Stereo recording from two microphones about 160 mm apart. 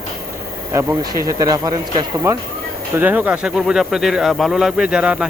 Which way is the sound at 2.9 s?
10° right (ahead or behind).